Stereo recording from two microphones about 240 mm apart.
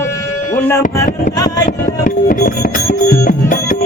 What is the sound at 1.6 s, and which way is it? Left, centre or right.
Music, left.